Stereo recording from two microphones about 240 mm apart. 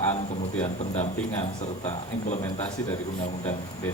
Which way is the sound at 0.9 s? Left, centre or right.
Left.